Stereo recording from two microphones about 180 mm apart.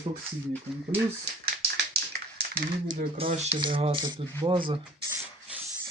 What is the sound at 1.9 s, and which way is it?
Tap, 60° right (ahead or behind).